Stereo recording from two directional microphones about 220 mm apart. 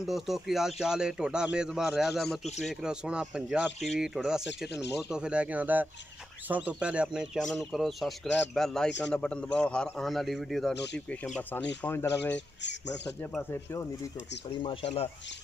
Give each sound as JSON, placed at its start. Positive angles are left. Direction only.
{"t": 0.0, "sound": "speech", "side_deg": 0}
{"t": 10.7, "sound": "speech", "side_deg": 50}
{"t": 11.8, "sound": "speech", "side_deg": 10}
{"t": 14.6, "sound": "speech", "side_deg": 25}